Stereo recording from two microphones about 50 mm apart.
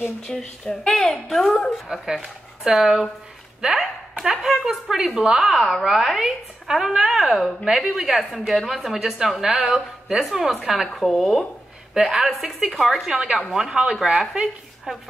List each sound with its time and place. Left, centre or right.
0.2 s speech: centre
1.9 s a woman's voice: centre
5.5 s a woman's voice: centre
8.2 s a woman's voice: centre
13.1 s a woman's voice: centre